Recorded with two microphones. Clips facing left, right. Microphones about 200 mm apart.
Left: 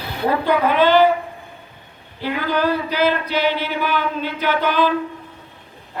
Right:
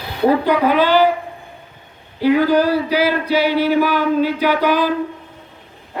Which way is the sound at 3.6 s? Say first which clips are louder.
Right 7 dB; 40° right (ahead or behind).